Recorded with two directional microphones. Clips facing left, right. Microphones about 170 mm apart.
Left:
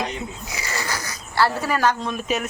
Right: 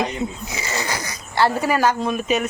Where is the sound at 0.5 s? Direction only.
20° right (ahead or behind).